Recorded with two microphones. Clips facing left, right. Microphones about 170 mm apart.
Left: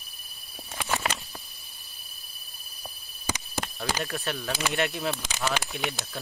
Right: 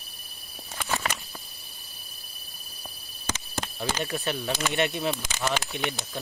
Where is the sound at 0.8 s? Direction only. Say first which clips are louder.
Left 1 dB; 15° left (ahead or behind).